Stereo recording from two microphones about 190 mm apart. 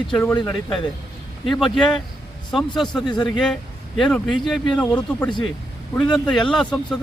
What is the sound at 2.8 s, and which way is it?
Speech, 25° left (ahead or behind).